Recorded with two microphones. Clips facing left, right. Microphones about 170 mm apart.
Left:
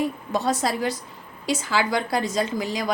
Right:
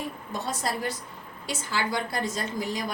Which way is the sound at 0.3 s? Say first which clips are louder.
Left 7 dB; 90° left.